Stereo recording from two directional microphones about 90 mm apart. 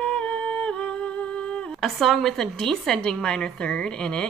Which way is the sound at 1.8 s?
Centre (ahead or behind).